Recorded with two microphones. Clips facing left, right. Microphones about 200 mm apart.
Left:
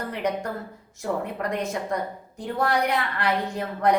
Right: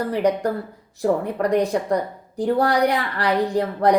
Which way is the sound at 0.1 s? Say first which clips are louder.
Right 7 dB; 35° right (ahead or behind).